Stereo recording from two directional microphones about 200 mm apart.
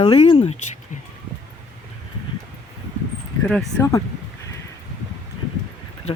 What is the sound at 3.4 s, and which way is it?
Speech, centre (ahead or behind).